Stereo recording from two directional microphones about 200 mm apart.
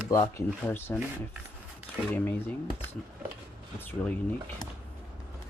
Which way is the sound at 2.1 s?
10° left (ahead or behind).